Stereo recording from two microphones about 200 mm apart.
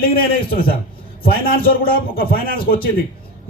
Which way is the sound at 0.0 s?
45° left (ahead or behind).